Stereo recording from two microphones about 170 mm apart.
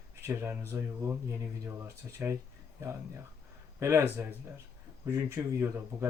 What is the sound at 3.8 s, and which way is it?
Speech, 15° right (ahead or behind).